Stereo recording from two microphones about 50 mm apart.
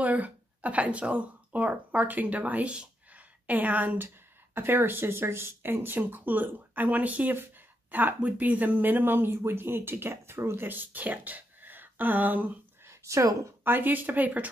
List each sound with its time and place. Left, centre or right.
0.0 s speech: right
4.6 s speech: right
10.7 s speech: right
12.8 s a sound: right
13.7 s speech: right